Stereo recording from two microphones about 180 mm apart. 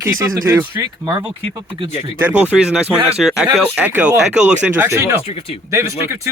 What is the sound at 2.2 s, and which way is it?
A man's voice, 5° right (ahead or behind).